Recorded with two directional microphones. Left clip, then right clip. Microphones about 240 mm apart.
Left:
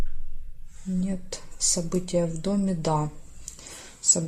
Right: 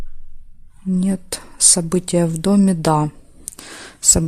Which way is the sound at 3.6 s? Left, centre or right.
Right.